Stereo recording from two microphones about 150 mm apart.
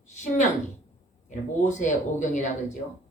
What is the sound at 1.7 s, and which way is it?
Speech, 55° left (ahead or behind).